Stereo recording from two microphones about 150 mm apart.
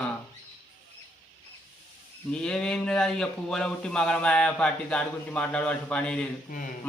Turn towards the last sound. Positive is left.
turn(degrees=5)  # may be behind; listen again after turning